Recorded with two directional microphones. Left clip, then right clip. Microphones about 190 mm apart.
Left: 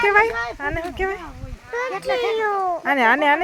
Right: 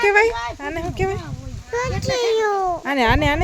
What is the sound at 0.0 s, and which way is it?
Speech, 30° right (ahead or behind).